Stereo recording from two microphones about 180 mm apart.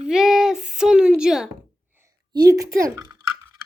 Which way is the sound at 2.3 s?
20° right (ahead or behind).